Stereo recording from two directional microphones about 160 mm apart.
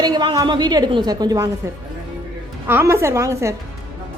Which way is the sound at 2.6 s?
15° right (ahead or behind).